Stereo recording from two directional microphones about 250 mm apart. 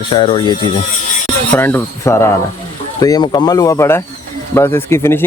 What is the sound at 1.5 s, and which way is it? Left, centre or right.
Speech, centre.